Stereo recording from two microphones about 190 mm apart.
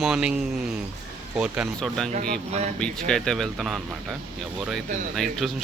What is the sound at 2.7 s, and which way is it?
Speech, 5° left (ahead or behind).